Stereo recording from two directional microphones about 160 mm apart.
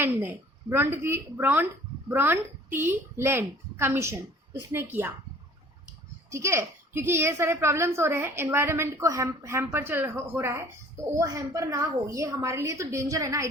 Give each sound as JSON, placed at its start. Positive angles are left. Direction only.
{"t": 0.0, "sound": "a woman's voice", "side_deg": -15}
{"t": 6.3, "sound": "a woman's voice", "side_deg": -15}